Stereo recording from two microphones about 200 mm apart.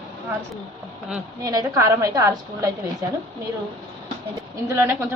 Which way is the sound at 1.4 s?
20° right (ahead or behind).